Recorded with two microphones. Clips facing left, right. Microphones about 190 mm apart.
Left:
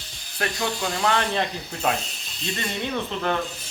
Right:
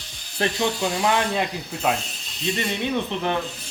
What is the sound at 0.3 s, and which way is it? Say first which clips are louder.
Speech: right 4 dB; 20° right (ahead or behind).